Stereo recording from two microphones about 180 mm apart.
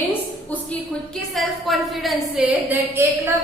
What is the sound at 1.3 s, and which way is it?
A woman's voice, centre (ahead or behind).